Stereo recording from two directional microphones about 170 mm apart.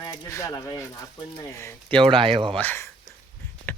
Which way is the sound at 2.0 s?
30° right (ahead or behind).